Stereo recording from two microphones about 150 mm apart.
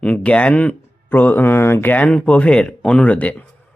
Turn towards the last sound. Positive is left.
turn(degrees=10)  # may be behind; listen again after turning